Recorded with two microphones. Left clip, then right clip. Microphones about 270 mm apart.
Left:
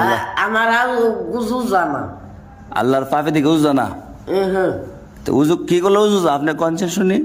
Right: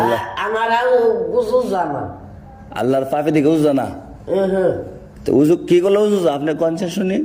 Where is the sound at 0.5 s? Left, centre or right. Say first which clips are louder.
Right 2 dB; centre.